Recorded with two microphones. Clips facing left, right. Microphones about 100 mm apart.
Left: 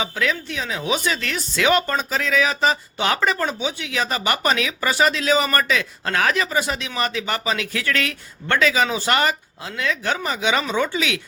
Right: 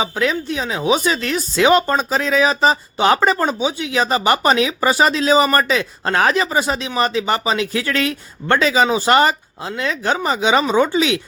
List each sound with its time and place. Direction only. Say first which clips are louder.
0.0 s speech: right 4 dB; 25° right (ahead or behind)